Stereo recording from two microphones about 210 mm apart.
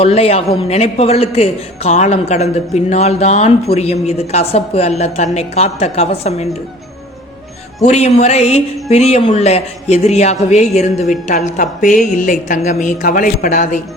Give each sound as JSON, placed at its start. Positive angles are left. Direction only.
{"t": 0.0, "sound": "a man's voice", "side_deg": 30}
{"t": 7.8, "sound": "a man's voice", "side_deg": 30}